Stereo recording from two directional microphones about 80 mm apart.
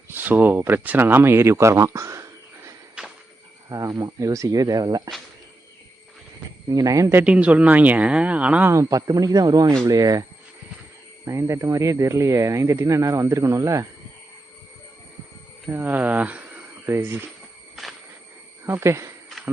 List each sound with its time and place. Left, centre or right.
0.1 s speech: right
3.0 s walk: centre
3.7 s speech: right
6.7 s speech: right
7.3 s speech: centre
8.7 s speech: right
11.3 s speech: right
15.7 s speech: right
16.9 s speech: right
18.6 s speech: right